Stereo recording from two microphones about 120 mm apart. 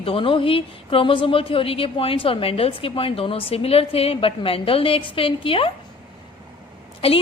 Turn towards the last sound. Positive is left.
turn(degrees=50)  # may be behind; listen again after turning